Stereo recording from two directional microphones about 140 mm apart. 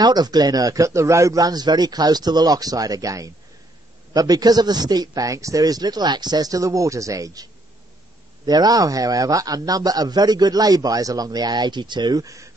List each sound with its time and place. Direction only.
0.0 s a man's voice: 30° right (ahead or behind)
8.5 s a man's voice: 30° right (ahead or behind)